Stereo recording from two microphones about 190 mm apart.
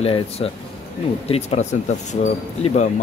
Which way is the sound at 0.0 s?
30° left (ahead or behind).